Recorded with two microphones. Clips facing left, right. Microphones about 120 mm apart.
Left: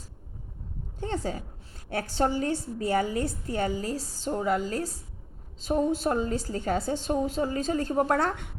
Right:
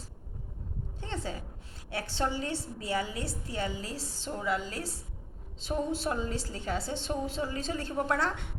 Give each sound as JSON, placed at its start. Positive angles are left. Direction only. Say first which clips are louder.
{"t": 0.9, "sound": "a woman's voice", "louder": "left 7 dB", "side_deg": 40}